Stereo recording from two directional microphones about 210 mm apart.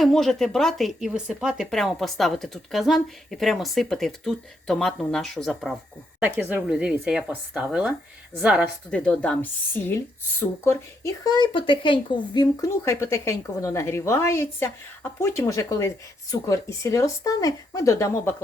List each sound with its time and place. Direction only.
0.0 s speech: centre (ahead or behind)
6.1 s speech: 10° right (ahead or behind); by 18.4 s 15° left (ahead or behind)